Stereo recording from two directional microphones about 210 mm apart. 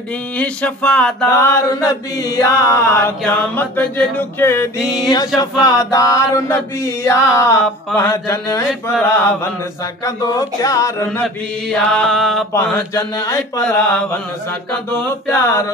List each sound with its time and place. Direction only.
0.4 s chant: 5° left (ahead or behind)
4.7 s chant: 5° right (ahead or behind)
5.1 s chant: 15° left (ahead or behind)
11.7 s chant: 5° left (ahead or behind)
12.5 s chant: 15° left (ahead or behind)